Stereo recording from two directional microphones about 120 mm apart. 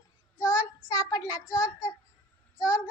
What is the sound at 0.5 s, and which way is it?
Child singing, 30° left (ahead or behind).